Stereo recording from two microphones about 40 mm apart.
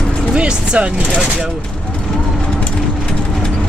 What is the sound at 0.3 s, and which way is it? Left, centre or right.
Speech, right.